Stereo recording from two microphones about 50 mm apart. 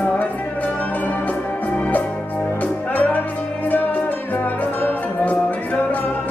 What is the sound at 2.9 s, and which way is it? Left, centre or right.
Music, left.